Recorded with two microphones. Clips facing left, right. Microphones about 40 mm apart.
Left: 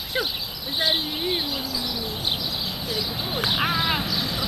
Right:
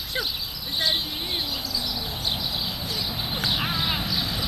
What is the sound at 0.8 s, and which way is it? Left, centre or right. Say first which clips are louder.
Speech: left 3 dB; centre.